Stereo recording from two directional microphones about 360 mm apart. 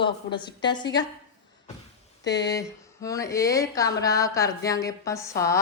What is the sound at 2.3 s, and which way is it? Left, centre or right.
A woman's voice, centre.